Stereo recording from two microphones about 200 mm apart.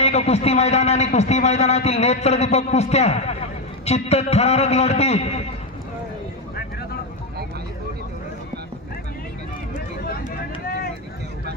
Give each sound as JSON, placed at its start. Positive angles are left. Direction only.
{"t": 0.0, "sound": "a man's voice", "side_deg": 30}
{"t": 10.0, "sound": "vehicle", "side_deg": 50}